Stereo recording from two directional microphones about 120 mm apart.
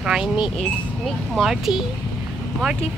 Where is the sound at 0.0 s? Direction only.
5° right (ahead or behind).